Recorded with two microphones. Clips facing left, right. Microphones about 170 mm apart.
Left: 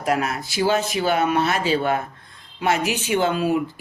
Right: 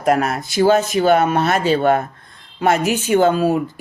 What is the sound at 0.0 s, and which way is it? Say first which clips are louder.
Speech: right 5 dB; 50° right (ahead or behind).